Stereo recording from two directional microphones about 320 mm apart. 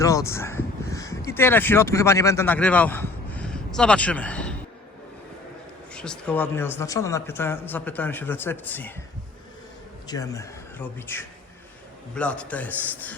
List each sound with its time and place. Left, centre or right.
0.0 s speech: centre
5.9 s speech: centre
10.1 s a man's voice: centre